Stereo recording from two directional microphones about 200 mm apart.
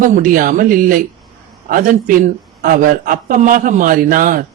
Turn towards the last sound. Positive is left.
turn(degrees=-45)  # may be behind; listen again after turning